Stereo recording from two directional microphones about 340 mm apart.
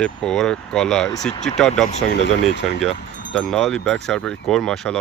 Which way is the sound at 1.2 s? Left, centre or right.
Centre.